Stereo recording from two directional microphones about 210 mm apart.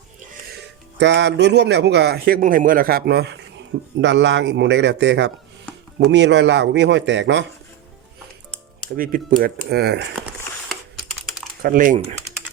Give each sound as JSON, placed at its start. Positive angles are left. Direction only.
{"t": 0.6, "sound": "a man's voice", "side_deg": -55}
{"t": 9.0, "sound": "speech", "side_deg": -45}
{"t": 11.6, "sound": "speech", "side_deg": -40}
{"t": 12.3, "sound": "typing", "side_deg": 15}